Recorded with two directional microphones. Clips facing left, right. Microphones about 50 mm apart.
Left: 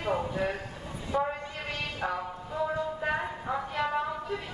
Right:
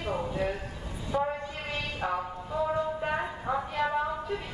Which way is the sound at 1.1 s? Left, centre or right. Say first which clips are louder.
Even; centre.